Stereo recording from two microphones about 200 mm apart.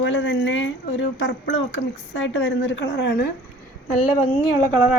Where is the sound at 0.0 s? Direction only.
65° left (ahead or behind).